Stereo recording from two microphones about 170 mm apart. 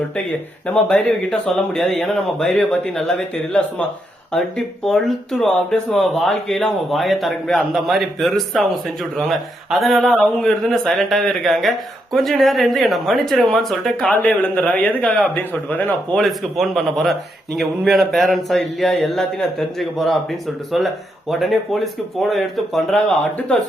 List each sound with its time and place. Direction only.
0.7 s speech: 5° left (ahead or behind)